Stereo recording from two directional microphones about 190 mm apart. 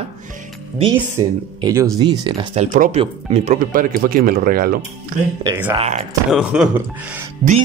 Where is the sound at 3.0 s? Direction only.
35° right (ahead or behind); by 4.7 s 50° right (ahead or behind).